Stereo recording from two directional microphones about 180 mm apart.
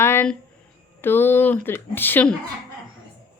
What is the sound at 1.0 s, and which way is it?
A woman's voice, 10° left (ahead or behind).